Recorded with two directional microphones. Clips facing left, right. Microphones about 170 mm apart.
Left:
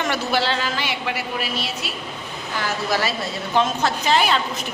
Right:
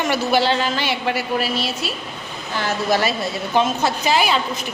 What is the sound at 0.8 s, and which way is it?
Speech, 35° right (ahead or behind).